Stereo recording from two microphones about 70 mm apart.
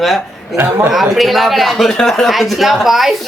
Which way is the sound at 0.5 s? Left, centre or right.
Right.